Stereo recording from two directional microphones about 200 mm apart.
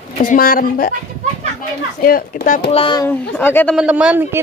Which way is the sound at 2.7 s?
25° left (ahead or behind).